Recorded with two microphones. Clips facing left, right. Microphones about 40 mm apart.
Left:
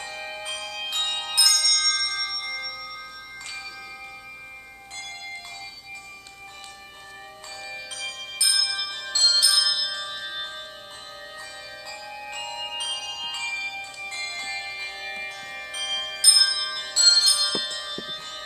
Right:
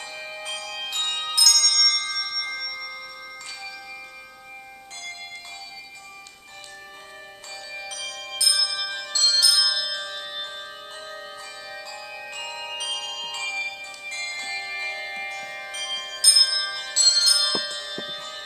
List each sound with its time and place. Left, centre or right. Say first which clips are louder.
0.0 s music: left 1 dB; centre
1.3 s glockenspiel: right 1 dB; centre
1.6 s bell: right 1 dB; centre
7.7 s music: right 1 dB; centre
9.0 s bell: even; centre
9.8 s music: right 1 dB; centre
12.4 s music: left 1 dB; centre
12.7 s music: right 1 dB; centre
16.1 s bell: right 1 dB; centre
17.4 s music: right 1 dB; centre